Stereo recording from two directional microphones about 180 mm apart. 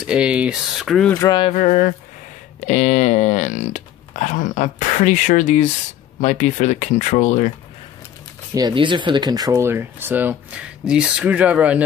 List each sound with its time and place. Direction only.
0.0 s speech: 5° right (ahead or behind)
1.1 s speech: 15° left (ahead or behind)
1.4 s speech: 40° left (ahead or behind)
8.5 s speech: 25° right (ahead or behind); by 11.8 s 5° right (ahead or behind)